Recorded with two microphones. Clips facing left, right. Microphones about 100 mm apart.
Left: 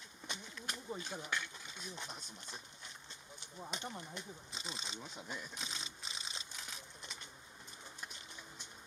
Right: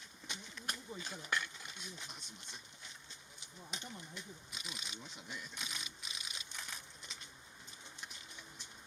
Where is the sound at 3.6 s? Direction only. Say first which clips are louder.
Left 4 dB; 50° left (ahead or behind).